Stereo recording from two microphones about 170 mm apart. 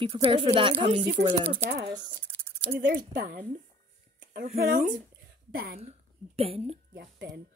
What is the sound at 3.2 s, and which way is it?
Speech, 55° right (ahead or behind).